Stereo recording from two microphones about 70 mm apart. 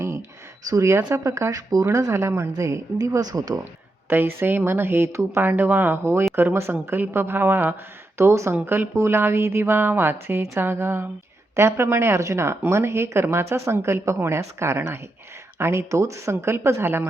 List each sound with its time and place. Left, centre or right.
0.7 s speech: right
2.1 s speech: right
4.1 s speech: right
5.4 s speech: right
8.2 s speech: right